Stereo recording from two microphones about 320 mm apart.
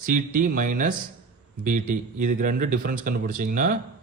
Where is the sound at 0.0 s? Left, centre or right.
Right.